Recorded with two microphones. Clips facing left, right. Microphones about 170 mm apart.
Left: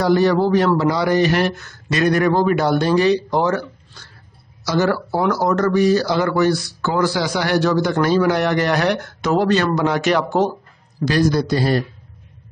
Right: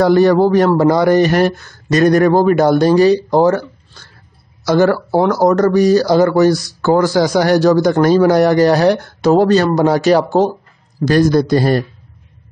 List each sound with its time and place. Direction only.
0.0 s speech: 50° right (ahead or behind)
4.6 s speech: 50° right (ahead or behind)
5.3 s speech: 40° right (ahead or behind)
11.1 s speech: 50° right (ahead or behind)